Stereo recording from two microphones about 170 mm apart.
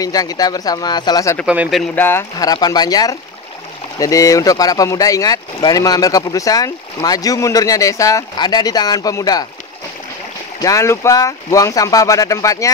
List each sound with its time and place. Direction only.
0.0 s speech: 20° left (ahead or behind)
1.4 s speech: 5° right (ahead or behind)
2.0 s speech: 15° left (ahead or behind)
10.6 s speech: 20° left (ahead or behind)